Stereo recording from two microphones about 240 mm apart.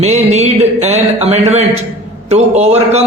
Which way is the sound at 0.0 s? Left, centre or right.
Right.